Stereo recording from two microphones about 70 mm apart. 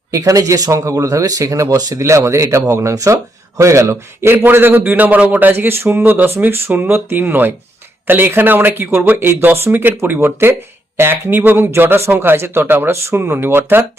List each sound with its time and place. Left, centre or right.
0.1 s speech: right
0.7 s speech: right
1.6 s speech: right
2.0 s a man's voice: right